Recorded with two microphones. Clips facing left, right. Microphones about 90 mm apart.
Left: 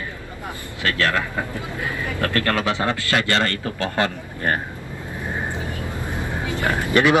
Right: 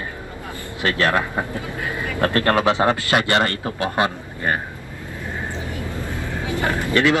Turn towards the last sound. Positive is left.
turn(degrees=20)  # may be behind; listen again after turning